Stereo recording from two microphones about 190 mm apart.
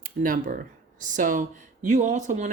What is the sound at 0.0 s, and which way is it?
Speech, 45° right (ahead or behind).